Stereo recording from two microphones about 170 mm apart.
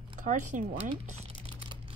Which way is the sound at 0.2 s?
50° right (ahead or behind).